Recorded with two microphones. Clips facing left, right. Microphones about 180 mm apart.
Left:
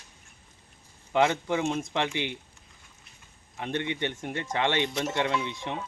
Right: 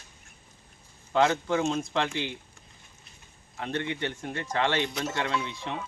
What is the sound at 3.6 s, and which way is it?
Speech, 20° left (ahead or behind).